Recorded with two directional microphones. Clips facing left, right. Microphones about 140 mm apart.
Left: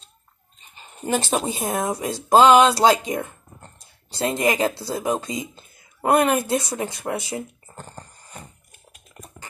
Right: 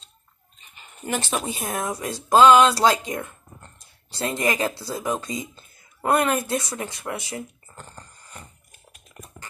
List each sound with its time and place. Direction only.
0.7 s speech: 30° left (ahead or behind)